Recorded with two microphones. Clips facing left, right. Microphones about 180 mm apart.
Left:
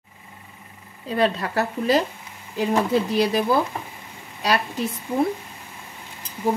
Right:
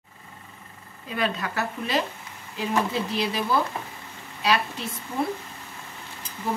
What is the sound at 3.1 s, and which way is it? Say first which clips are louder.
Speech: left 4 dB; 45° left (ahead or behind).